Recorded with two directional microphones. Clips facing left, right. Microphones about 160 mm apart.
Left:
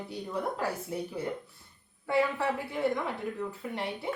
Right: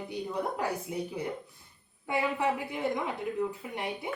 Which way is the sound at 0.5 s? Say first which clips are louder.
Right 1 dB; 15° right (ahead or behind).